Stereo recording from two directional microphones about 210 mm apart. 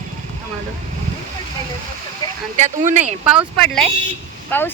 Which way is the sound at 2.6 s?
35° right (ahead or behind).